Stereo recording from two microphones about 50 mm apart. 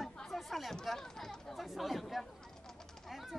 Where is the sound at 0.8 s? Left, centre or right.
Centre.